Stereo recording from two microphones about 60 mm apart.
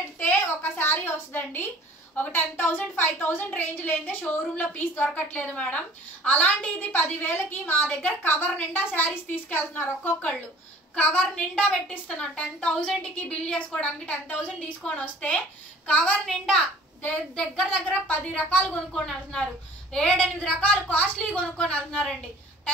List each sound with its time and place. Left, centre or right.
0.5 s a woman's voice: left
12.1 s a woman's voice: centre
17.6 s a woman's voice: left